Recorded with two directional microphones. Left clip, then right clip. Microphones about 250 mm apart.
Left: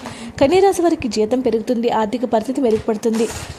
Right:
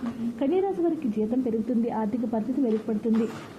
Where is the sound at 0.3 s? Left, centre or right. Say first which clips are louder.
Left 13 dB; left.